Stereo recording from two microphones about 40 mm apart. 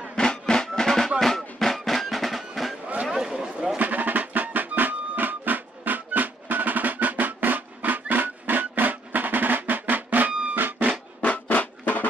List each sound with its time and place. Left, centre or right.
0.1 s music: centre
3.1 s a sound: centre
3.7 s music: right
11.1 s drum: left